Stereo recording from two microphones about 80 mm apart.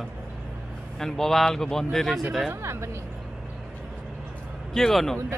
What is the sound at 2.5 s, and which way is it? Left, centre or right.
Speech, right.